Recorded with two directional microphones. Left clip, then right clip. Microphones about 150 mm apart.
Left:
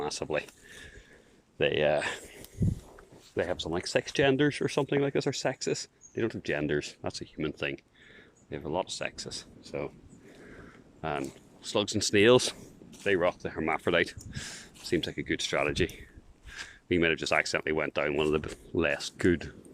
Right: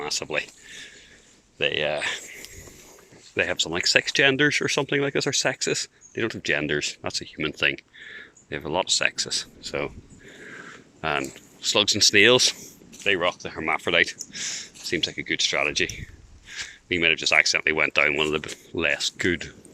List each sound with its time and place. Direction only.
0.0 s speech: 50° left (ahead or behind)
1.5 s speech: 90° left; by 2.2 s 70° left (ahead or behind)
3.3 s speech: 15° left (ahead or behind)
9.6 s speech: 5° right (ahead or behind)
10.4 s a sound: centre (ahead or behind)
11.0 s speech: 10° left (ahead or behind); by 12.4 s 35° left (ahead or behind)
12.4 s speech: 60° left (ahead or behind)
13.1 s speech: 50° left (ahead or behind); by 17.3 s 65° left (ahead or behind)
17.3 s speech: 45° left (ahead or behind)
17.6 s speech: 25° left (ahead or behind); by 18.6 s 40° left (ahead or behind)
18.8 s speech: 50° left (ahead or behind)